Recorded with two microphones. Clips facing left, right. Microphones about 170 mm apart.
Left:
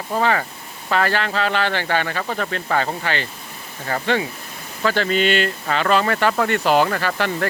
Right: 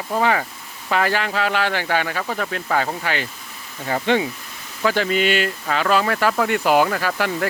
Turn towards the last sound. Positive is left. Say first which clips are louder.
# even
turn(degrees=-5)  # may be behind; listen again after turning